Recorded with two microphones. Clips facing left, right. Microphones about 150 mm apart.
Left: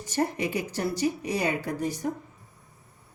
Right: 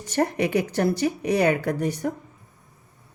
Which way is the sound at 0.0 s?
65° right (ahead or behind).